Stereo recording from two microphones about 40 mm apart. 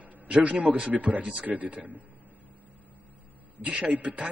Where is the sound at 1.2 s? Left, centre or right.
Centre.